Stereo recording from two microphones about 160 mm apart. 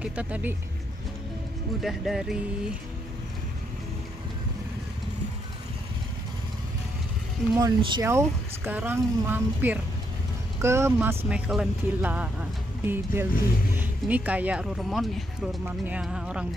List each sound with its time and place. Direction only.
0.0 s speech: 10° right (ahead or behind)
1.8 s speech: centre (ahead or behind)
7.5 s speech: 25° right (ahead or behind); by 16.4 s 5° right (ahead or behind)